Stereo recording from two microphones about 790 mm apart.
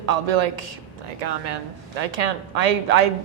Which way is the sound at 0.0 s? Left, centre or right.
Right.